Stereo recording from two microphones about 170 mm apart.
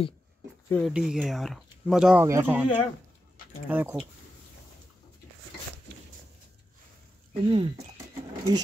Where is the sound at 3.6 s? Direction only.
10° right (ahead or behind).